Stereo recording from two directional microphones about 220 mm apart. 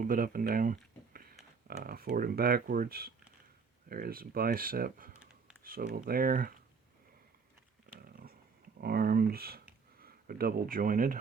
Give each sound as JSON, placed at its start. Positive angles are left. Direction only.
{"t": 0.0, "sound": "speech", "side_deg": -40}
{"t": 7.9, "sound": "a sound", "side_deg": -40}
{"t": 8.8, "sound": "speech", "side_deg": -45}